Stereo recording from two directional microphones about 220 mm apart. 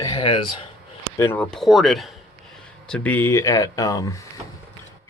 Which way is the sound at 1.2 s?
10° left (ahead or behind).